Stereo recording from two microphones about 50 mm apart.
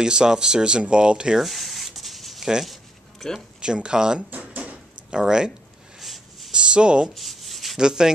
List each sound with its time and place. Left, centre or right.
0.0 s speech: centre
1.4 s rub: centre
2.6 s a sound: centre
3.3 s speech: centre
4.3 s a sound: right
5.1 s speech: centre
5.9 s a sound: centre
6.5 s speech: centre
7.2 s rub: centre
7.8 s speech: centre